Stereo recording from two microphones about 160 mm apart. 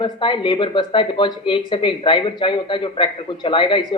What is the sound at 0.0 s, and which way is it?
Speech, 30° left (ahead or behind).